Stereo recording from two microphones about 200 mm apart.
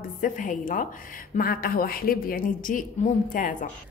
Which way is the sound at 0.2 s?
40° left (ahead or behind).